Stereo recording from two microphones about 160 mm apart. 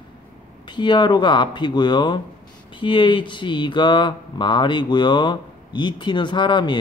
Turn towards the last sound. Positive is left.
turn(degrees=30)  # may be behind; listen again after turning